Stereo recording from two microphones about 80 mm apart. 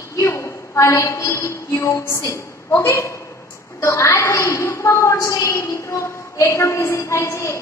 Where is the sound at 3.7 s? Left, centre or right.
Left.